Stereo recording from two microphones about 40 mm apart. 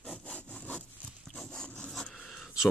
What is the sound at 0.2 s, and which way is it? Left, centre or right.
Sawing, left.